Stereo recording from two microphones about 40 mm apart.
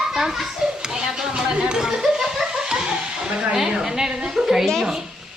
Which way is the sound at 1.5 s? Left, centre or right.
Centre.